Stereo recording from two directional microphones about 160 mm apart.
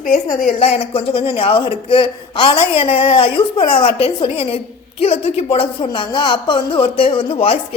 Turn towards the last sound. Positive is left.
turn(degrees=35)  # may be behind; listen again after turning